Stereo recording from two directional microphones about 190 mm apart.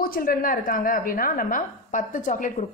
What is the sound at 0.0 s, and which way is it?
A woman's voice, 50° left (ahead or behind).